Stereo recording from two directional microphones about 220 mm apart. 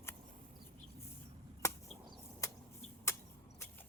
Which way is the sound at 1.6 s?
10° left (ahead or behind).